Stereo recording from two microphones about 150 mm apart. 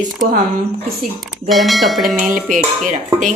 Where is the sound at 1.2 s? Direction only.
Centre (ahead or behind).